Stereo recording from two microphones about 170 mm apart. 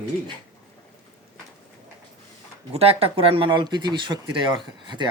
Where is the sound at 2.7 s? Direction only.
35° right (ahead or behind).